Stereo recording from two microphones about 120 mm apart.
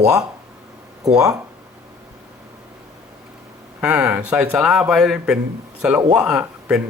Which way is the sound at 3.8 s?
10° right (ahead or behind).